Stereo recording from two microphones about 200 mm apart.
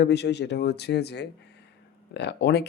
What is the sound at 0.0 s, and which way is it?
Speech, 55° left (ahead or behind).